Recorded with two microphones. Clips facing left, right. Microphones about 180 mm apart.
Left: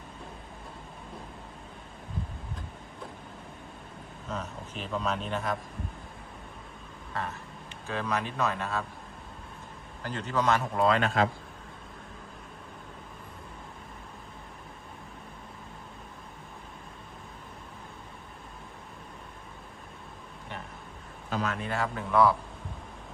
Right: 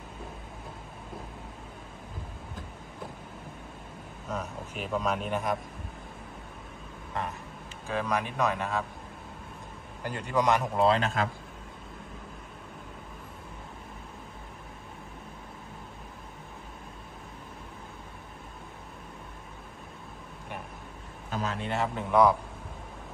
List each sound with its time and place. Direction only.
4.3 s a man's voice: 10° right (ahead or behind)
7.9 s a man's voice: 10° right (ahead or behind)
10.0 s a man's voice: 10° right (ahead or behind)
10.8 s a man's voice: 30° right (ahead or behind)
21.3 s speech: 30° right (ahead or behind)